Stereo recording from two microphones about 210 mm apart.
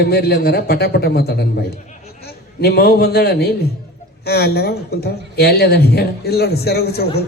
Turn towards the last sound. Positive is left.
turn(degrees=50)  # may be behind; listen again after turning